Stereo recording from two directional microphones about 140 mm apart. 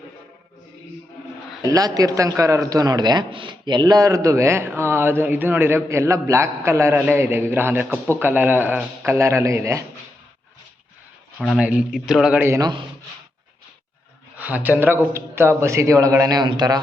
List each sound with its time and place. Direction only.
1.6 s a man's voice: 25° right (ahead or behind)
11.3 s speech: 5° right (ahead or behind)
12.4 s a man's voice: 20° right (ahead or behind)
14.3 s a man's voice: 10° right (ahead or behind); by 16.8 s 30° right (ahead or behind)